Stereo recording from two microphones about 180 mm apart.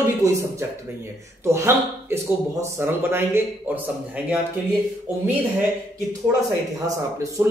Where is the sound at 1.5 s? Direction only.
15° right (ahead or behind).